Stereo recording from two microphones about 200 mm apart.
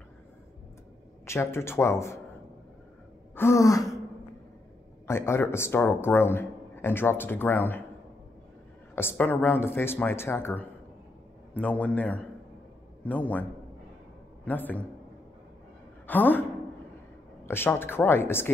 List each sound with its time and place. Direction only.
1.2 s a man's voice: 15° left (ahead or behind)
3.3 s a man's voice: 15° left (ahead or behind)
5.0 s a man's voice: 10° left (ahead or behind)
8.9 s a man's voice: 10° left (ahead or behind)
16.1 s a man's voice: 10° left (ahead or behind)
17.5 s a man's voice: 10° left (ahead or behind)